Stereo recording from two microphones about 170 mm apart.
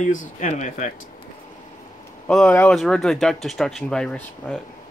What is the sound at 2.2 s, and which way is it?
Speech, 10° left (ahead or behind).